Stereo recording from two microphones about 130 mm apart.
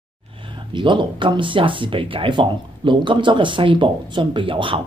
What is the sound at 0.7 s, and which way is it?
Speech, 40° right (ahead or behind).